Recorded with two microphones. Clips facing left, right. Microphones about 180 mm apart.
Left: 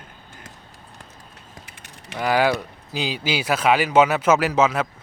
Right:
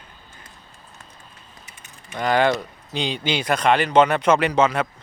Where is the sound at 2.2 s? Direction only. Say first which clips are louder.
Right 1 dB; 5° left (ahead or behind).